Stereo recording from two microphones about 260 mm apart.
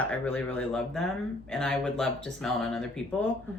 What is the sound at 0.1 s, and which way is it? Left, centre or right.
Speech, centre.